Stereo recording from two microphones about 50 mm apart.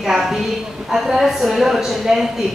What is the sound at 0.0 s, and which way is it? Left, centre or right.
A woman's voice, centre.